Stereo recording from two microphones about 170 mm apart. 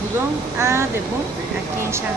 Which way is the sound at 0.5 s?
15° right (ahead or behind).